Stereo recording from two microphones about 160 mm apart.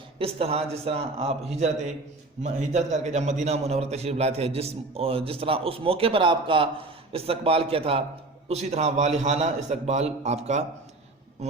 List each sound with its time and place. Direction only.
0.2 s a man's voice: 40° right (ahead or behind)